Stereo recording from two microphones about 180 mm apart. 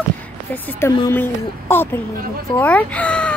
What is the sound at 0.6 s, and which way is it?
Speech, 15° left (ahead or behind).